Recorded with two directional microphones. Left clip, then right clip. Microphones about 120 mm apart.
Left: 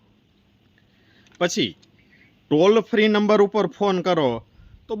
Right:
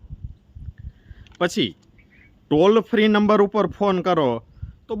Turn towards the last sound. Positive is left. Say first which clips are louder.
# even
turn(degrees=-50)  # may be behind; listen again after turning